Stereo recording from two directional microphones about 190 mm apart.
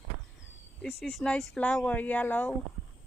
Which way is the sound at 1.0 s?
Centre (ahead or behind).